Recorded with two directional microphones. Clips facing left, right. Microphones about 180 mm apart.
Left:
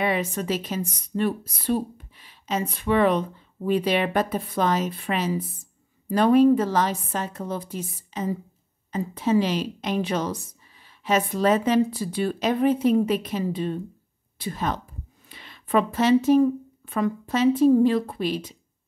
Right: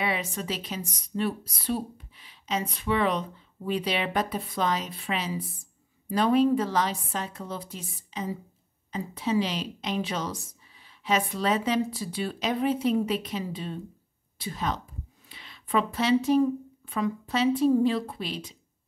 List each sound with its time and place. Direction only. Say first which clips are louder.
0.0 s speech: left 5 dB; 50° left (ahead or behind)